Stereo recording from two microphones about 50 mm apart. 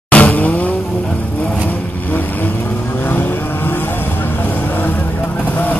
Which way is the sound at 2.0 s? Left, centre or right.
Left.